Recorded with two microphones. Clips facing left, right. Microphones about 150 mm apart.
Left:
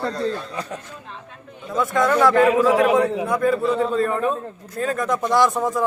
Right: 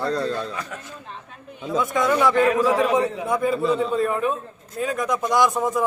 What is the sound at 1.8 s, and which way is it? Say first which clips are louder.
Speech: left 3 dB; centre (ahead or behind).